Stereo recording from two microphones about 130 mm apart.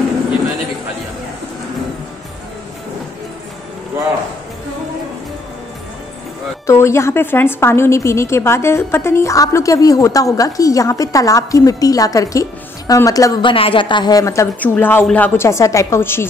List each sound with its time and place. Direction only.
6.6 s a woman's voice: 20° left (ahead or behind)
13.4 s a woman's voice: 40° left (ahead or behind); by 16.3 s 20° left (ahead or behind)